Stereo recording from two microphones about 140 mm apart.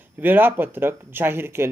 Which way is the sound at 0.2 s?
15° right (ahead or behind).